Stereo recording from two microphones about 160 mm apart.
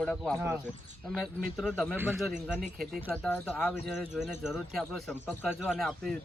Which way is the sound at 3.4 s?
5° left (ahead or behind).